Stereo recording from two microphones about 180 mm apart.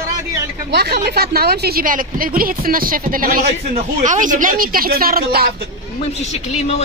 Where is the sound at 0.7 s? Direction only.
65° right (ahead or behind).